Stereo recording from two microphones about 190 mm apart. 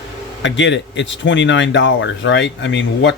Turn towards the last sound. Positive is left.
turn(degrees=70)  # may be behind; listen again after turning